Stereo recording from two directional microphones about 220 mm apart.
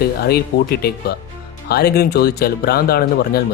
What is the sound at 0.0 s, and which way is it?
Speech, 45° left (ahead or behind).